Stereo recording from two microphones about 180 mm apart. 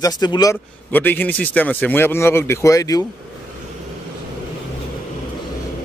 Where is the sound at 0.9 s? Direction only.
10° left (ahead or behind).